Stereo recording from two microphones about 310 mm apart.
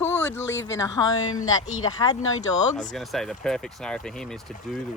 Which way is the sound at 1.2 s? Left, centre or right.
Left.